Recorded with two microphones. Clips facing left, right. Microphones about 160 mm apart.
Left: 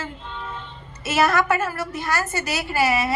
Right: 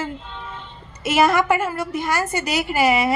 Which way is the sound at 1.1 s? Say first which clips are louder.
Right 3 dB; 15° right (ahead or behind).